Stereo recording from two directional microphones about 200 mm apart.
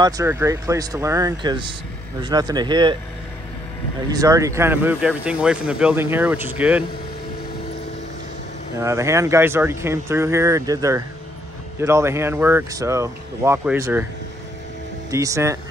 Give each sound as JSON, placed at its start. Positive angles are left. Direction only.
{"t": 0.0, "sound": "speech", "side_deg": -15}
{"t": 4.1, "sound": "speech", "side_deg": -15}
{"t": 8.7, "sound": "speech", "side_deg": -15}
{"t": 15.0, "sound": "speech", "side_deg": -15}